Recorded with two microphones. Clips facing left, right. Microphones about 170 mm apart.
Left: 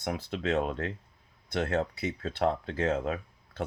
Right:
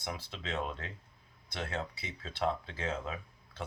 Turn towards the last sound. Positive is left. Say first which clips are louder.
# left 7 dB
turn(degrees=45)  # may be behind; listen again after turning